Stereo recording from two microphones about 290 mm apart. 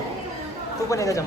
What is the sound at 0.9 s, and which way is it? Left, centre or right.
Speech, centre.